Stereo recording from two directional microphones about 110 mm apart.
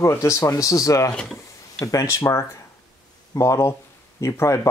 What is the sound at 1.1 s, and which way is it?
Speech, 5° left (ahead or behind).